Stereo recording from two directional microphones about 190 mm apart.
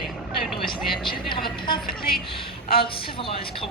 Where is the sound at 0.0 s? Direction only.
Centre (ahead or behind).